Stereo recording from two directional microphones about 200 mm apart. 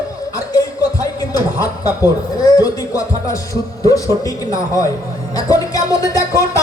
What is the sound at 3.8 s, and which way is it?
Speech, 15° left (ahead or behind).